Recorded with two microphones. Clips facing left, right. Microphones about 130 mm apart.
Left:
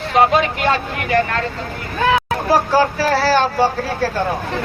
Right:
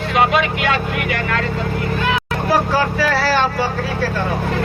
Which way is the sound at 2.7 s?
40° left (ahead or behind).